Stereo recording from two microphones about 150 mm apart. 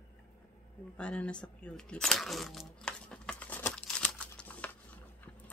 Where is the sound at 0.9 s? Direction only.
10° left (ahead or behind).